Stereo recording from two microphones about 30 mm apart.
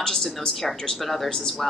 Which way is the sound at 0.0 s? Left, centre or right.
Centre.